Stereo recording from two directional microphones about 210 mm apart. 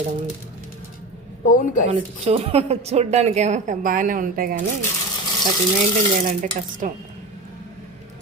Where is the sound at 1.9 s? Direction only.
30° right (ahead or behind).